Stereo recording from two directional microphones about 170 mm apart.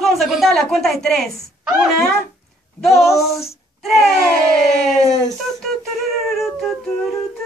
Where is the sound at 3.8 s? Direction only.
Centre (ahead or behind).